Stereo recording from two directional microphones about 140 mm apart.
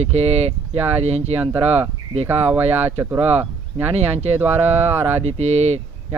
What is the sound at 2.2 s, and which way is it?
Speech, 15° right (ahead or behind).